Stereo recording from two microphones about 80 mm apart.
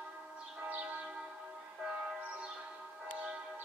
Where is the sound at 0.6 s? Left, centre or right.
Right.